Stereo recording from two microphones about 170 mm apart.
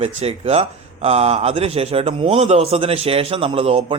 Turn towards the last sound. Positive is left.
turn(degrees=-35)  # may be behind; listen again after turning